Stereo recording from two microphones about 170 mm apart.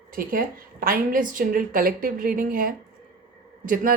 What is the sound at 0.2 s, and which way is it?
Speech, 60° right (ahead or behind).